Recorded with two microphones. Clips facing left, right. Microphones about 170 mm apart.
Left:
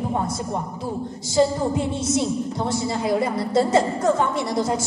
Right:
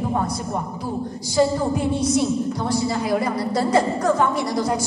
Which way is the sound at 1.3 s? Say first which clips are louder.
Even; 25° left (ahead or behind).